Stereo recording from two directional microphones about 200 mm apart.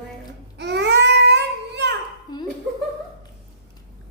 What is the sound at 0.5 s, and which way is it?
Babbling, 55° right (ahead or behind).